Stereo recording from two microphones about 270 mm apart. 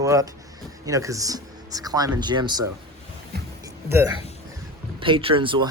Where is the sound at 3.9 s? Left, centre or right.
Centre.